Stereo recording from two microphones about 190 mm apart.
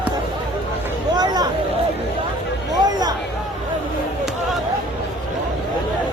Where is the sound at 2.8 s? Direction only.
20° right (ahead or behind).